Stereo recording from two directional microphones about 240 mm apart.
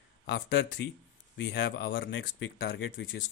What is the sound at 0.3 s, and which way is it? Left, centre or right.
Speech, left.